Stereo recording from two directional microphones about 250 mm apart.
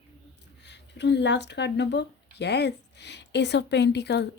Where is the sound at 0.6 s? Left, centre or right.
Left.